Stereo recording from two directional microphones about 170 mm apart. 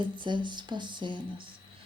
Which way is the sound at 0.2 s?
30° right (ahead or behind).